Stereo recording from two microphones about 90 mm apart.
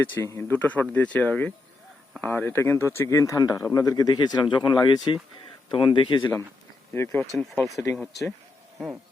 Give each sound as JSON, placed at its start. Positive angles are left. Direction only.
{"t": 0.2, "sound": "speech", "side_deg": 30}
{"t": 5.6, "sound": "speech", "side_deg": 70}
{"t": 6.9, "sound": "speech", "side_deg": 25}
{"t": 7.9, "sound": "speech", "side_deg": 5}